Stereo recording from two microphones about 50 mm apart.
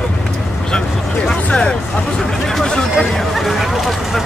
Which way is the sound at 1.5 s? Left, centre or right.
Centre.